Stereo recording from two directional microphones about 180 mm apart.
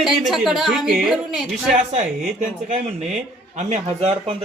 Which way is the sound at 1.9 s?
40° right (ahead or behind).